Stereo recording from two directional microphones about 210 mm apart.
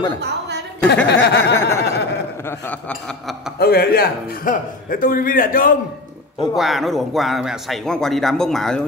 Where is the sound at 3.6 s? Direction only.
45° left (ahead or behind).